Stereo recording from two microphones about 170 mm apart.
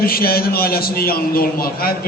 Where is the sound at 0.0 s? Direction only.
60° left (ahead or behind).